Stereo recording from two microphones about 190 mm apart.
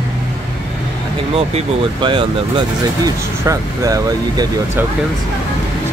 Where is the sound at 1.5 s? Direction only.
30° right (ahead or behind).